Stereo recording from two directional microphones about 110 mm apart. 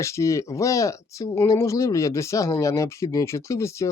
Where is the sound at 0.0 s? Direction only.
25° left (ahead or behind).